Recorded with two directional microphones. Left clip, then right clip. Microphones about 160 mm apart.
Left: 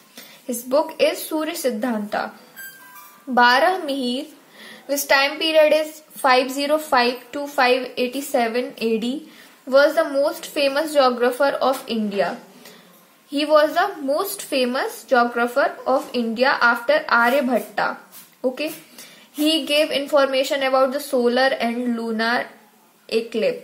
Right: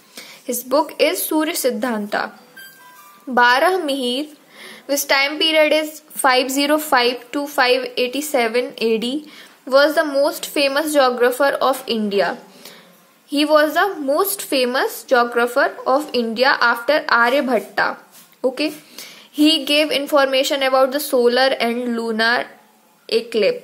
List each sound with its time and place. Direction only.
0.1 s a woman's voice: 40° right (ahead or behind)
3.3 s a woman's voice: 30° right (ahead or behind)